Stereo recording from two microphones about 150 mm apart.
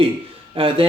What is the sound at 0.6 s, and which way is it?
Speech, 40° right (ahead or behind).